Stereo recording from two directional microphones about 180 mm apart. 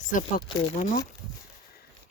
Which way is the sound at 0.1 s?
45° left (ahead or behind).